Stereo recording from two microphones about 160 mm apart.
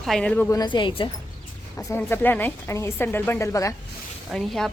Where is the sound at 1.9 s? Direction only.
15° left (ahead or behind).